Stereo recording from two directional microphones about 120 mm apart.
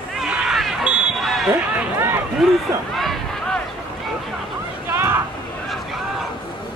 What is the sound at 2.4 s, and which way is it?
Run, centre (ahead or behind).